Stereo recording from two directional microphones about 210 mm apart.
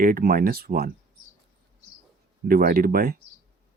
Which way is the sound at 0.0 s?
45° right (ahead or behind).